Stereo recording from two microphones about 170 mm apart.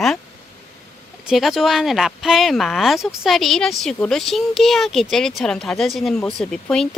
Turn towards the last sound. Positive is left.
turn(degrees=5)  # may be behind; listen again after turning